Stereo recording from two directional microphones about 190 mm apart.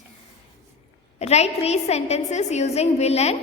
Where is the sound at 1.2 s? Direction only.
35° left (ahead or behind).